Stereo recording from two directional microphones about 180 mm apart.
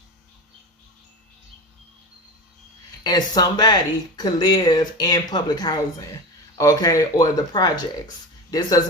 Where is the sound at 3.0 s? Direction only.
20° left (ahead or behind).